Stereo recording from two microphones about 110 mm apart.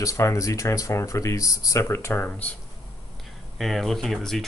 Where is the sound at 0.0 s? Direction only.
30° left (ahead or behind).